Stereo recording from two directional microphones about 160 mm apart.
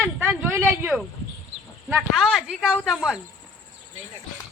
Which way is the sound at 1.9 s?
5° right (ahead or behind).